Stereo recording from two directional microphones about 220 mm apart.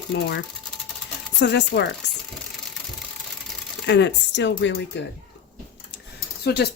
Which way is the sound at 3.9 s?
55° left (ahead or behind).